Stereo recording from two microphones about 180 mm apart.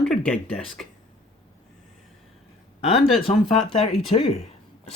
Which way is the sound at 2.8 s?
30° left (ahead or behind).